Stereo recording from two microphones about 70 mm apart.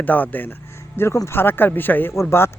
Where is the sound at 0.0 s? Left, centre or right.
Left.